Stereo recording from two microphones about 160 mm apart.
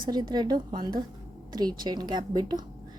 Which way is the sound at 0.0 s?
25° right (ahead or behind).